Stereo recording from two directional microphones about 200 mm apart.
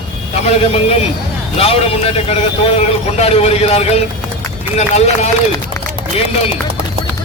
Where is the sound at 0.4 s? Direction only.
30° left (ahead or behind).